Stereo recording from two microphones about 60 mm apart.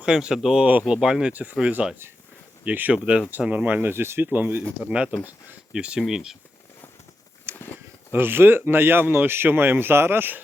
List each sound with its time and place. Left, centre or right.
0.0 s speech: centre
0.6 s speech: right
0.9 s speech: centre
1.3 s speech: right
2.6 s speech: right
2.9 s speech: centre
3.5 s speech: right
4.8 s speech: centre
7.5 s a sound: right
8.1 s speech: right